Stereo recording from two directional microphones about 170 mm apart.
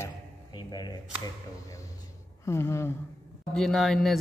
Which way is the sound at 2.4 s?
15° left (ahead or behind).